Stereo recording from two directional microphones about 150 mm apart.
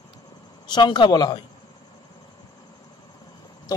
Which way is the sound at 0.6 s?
30° left (ahead or behind).